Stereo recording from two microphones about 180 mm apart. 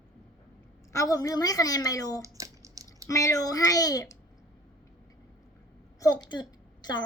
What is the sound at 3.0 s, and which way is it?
A woman's voice, 20° left (ahead or behind).